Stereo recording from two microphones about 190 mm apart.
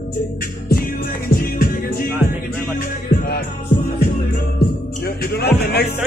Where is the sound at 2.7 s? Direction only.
50° left (ahead or behind).